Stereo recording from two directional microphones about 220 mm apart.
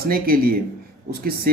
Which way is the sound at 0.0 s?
40° right (ahead or behind).